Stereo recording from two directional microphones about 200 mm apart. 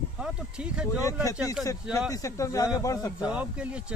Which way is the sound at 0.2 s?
5° right (ahead or behind).